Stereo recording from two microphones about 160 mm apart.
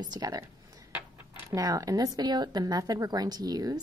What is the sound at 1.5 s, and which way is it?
Speech, 20° right (ahead or behind).